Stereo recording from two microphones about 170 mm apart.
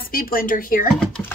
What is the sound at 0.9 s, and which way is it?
Speech, 5° left (ahead or behind).